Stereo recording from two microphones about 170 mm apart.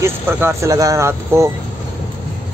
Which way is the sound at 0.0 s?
15° right (ahead or behind).